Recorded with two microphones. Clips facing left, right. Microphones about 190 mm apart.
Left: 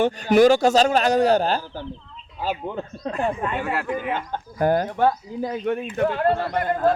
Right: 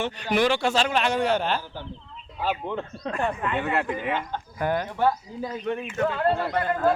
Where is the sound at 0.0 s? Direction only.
45° left (ahead or behind).